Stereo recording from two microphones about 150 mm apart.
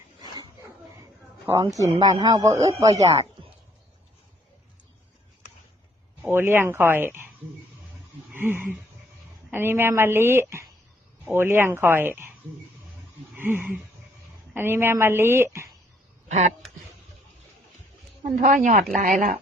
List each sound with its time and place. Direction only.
1.5 s speech: 20° right (ahead or behind)
2.9 s speech: 45° right (ahead or behind)
6.2 s speech: 15° right (ahead or behind)
8.3 s a sound: 15° right (ahead or behind)
9.5 s speech: 15° right (ahead or behind)
13.3 s a sound: 15° right (ahead or behind)
14.5 s speech: 15° right (ahead or behind)
18.2 s speech: 55° right (ahead or behind)